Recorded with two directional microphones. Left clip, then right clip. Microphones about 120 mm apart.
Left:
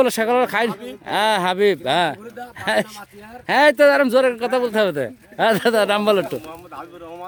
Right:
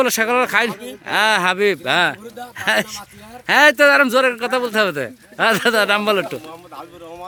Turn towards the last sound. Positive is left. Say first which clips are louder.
# even
turn(degrees=-5)  # may be behind; listen again after turning